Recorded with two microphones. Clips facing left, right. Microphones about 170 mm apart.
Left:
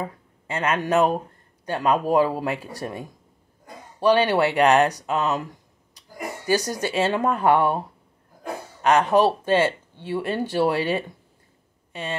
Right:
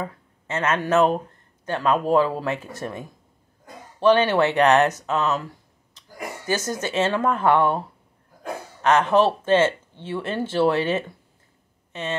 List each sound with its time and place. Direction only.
0.0 s a sound: 15° left (ahead or behind)
0.8 s speech: 10° left (ahead or behind)
4.0 s speech: 15° left (ahead or behind)
8.8 s speech: 10° left (ahead or behind)